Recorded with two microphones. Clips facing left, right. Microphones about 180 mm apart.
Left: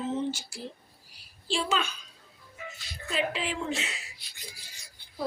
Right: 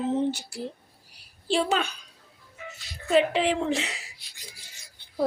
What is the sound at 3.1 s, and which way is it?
Speech, 65° right (ahead or behind).